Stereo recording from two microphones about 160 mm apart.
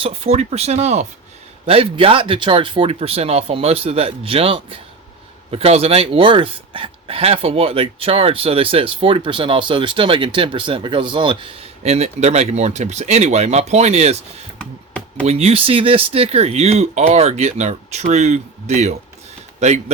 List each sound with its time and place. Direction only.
0.0 s a man's voice: 40° right (ahead or behind)
15.3 s a man's voice: 40° right (ahead or behind)